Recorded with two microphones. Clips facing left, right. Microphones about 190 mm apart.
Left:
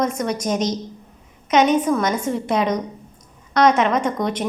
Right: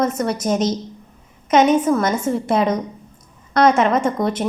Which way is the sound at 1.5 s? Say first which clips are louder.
Right 2 dB; 10° right (ahead or behind).